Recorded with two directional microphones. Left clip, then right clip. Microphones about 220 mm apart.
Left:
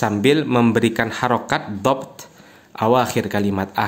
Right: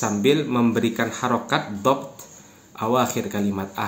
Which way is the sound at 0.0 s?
50° left (ahead or behind).